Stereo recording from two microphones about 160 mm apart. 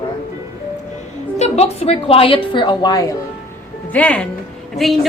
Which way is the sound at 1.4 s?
40° left (ahead or behind).